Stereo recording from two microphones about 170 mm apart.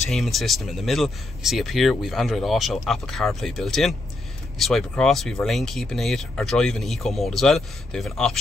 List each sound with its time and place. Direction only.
0.1 s speech: centre (ahead or behind)